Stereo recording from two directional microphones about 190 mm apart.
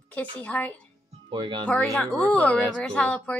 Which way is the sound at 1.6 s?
5° left (ahead or behind).